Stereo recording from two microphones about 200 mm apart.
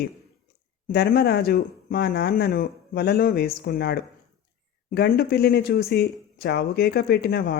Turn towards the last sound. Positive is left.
turn(degrees=55)  # may be behind; listen again after turning